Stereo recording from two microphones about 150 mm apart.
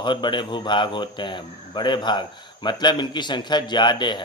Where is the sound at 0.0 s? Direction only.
30° left (ahead or behind).